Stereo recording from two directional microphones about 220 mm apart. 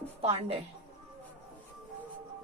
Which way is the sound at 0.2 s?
25° right (ahead or behind).